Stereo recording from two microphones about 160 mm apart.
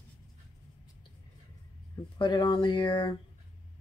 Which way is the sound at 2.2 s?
30° left (ahead or behind).